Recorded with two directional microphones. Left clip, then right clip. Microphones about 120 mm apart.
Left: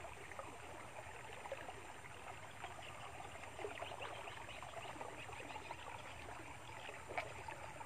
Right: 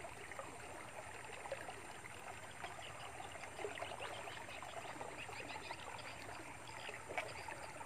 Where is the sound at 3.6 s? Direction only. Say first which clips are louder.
Right 1 dB; 30° right (ahead or behind).